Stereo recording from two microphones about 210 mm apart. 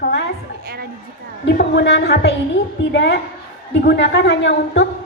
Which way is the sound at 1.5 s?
55° left (ahead or behind).